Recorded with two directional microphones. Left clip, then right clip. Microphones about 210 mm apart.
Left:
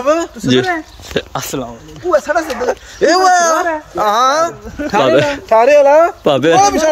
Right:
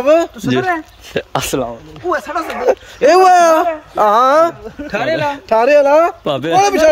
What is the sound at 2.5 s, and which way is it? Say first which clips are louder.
Speech: right 1 dB; 55° right (ahead or behind).